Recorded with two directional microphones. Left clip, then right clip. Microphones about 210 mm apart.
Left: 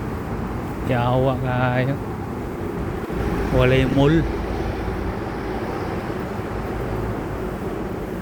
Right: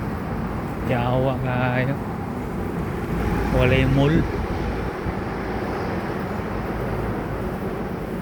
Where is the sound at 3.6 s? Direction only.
35° left (ahead or behind).